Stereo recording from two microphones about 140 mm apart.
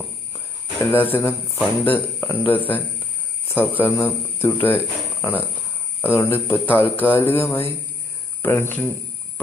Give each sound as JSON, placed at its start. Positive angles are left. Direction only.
{"t": 0.9, "sound": "a man's voice", "side_deg": 15}